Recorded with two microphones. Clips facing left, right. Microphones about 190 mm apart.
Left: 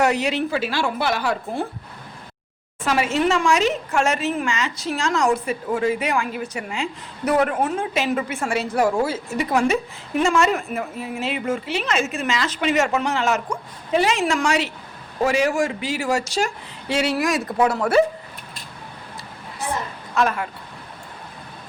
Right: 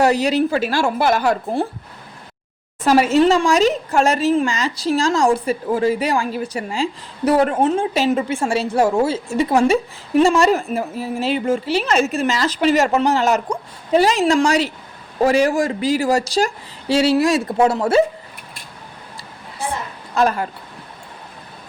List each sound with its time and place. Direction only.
0.0 s a woman's voice: 35° right (ahead or behind)
2.8 s a woman's voice: 40° right (ahead or behind)
20.1 s speech: 35° right (ahead or behind)